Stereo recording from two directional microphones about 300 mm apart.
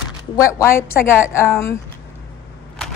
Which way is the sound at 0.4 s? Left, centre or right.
Centre.